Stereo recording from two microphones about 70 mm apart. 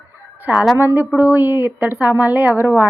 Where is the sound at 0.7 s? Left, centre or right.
Right.